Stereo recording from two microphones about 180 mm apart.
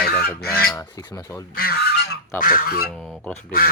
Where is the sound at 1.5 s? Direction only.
55° left (ahead or behind).